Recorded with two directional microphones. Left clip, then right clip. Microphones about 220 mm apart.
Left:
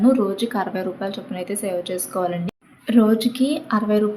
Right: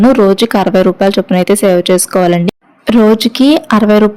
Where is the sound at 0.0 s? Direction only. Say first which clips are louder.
Right 12 dB; 40° right (ahead or behind).